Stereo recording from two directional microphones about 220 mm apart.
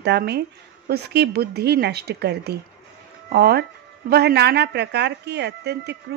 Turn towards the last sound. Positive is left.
turn(degrees=-50)  # may be behind; listen again after turning